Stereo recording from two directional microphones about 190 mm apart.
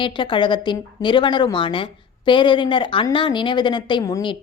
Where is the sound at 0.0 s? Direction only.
25° left (ahead or behind).